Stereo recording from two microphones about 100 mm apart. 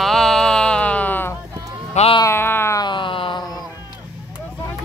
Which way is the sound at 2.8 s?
55° left (ahead or behind).